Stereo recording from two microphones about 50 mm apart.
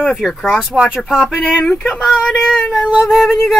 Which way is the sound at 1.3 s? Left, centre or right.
Centre.